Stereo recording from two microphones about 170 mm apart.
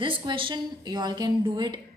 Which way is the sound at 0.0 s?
30° right (ahead or behind).